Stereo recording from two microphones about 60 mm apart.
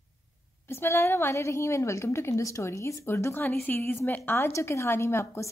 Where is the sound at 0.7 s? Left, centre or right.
Left.